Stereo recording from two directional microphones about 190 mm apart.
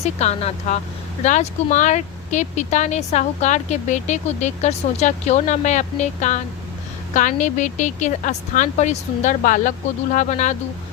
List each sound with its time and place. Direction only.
0.0 s speech: 35° left (ahead or behind)